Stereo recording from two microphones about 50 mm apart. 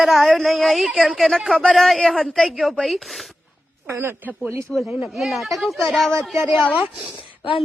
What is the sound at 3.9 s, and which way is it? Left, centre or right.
Speech, right.